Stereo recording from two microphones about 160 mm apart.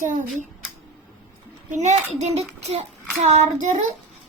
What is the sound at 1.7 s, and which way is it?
Child singing, 45° right (ahead or behind).